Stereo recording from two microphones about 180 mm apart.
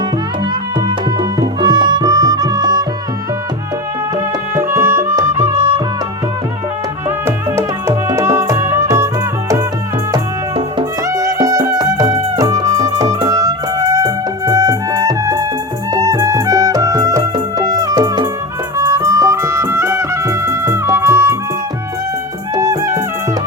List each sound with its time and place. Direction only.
1.2 s music: 25° right (ahead or behind)
4.5 s music: 15° right (ahead or behind)
7.3 s music: 15° right (ahead or behind)
10.8 s music: 15° right (ahead or behind)
22.5 s music: 15° right (ahead or behind)